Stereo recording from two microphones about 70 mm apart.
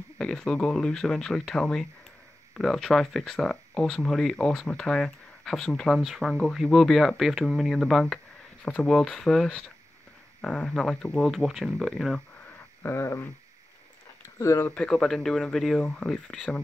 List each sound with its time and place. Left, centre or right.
0.2 s speech: centre
11.2 s speech: centre
12.4 s a sound: left
14.4 s speech: left
14.9 s speech: centre